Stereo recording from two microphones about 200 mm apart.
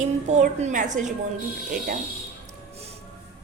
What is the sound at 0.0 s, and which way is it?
A woman's voice, 35° right (ahead or behind).